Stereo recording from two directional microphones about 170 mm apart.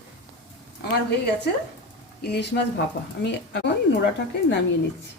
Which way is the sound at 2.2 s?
75° left (ahead or behind).